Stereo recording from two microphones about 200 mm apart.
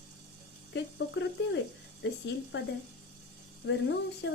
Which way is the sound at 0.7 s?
65° left (ahead or behind).